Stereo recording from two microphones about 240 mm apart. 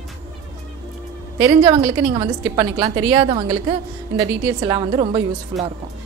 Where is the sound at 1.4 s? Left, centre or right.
Centre.